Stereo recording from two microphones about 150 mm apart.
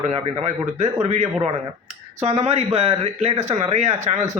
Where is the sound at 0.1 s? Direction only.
45° right (ahead or behind).